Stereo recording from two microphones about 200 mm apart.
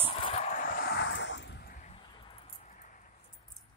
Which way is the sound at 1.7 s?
35° left (ahead or behind).